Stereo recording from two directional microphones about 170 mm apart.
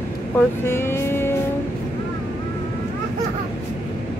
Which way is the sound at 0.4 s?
15° left (ahead or behind).